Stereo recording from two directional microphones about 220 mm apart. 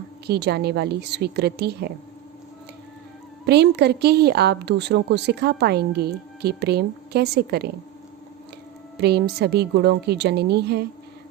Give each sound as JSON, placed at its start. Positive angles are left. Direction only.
{"t": 0.3, "sound": "a woman's voice", "side_deg": -50}
{"t": 3.4, "sound": "a woman's voice", "side_deg": -50}
{"t": 9.0, "sound": "a woman's voice", "side_deg": -50}